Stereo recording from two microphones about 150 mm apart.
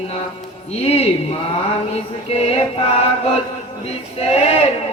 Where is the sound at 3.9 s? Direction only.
45° left (ahead or behind).